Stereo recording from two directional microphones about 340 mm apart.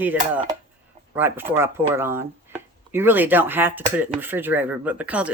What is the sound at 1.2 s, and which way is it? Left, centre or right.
Chopping, centre.